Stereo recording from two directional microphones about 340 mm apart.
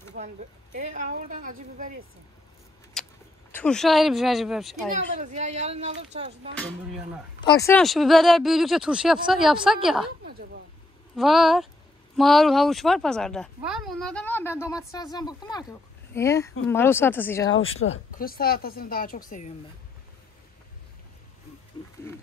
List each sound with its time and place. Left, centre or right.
0.7 s speech: right
2.9 s a sound: centre
3.5 s speech: centre
5.2 s speech: right
6.5 s speech: centre
11.1 s speech: centre
17.6 s speech: left
18.1 s speech: left